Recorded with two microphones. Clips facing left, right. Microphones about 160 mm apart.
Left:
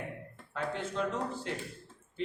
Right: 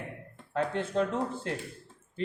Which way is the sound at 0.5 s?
55° right (ahead or behind).